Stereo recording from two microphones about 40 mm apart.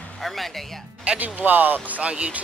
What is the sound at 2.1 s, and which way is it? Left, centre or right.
Speech, right.